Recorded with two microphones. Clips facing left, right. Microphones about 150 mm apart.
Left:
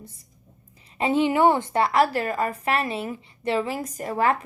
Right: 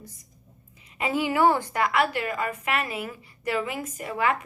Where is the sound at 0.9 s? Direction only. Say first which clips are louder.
Left 4 dB; 25° left (ahead or behind).